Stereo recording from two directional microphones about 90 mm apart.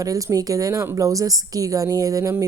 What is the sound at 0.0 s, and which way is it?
A woman's voice, 40° right (ahead or behind).